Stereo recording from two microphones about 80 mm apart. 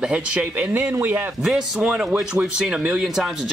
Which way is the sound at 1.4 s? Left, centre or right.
Centre.